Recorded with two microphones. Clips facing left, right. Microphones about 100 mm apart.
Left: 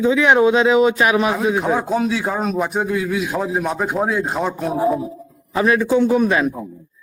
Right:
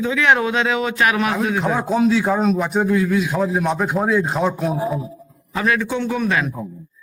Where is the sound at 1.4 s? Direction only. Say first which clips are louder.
Left 2 dB; 5° left (ahead or behind).